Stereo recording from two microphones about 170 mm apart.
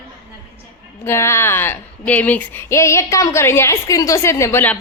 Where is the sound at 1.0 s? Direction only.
15° left (ahead or behind).